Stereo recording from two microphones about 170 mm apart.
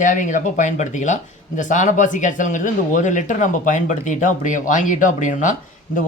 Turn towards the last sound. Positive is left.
turn(degrees=50)  # may be behind; listen again after turning